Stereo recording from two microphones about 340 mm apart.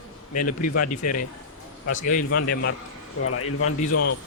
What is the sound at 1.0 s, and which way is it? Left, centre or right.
Speech, left.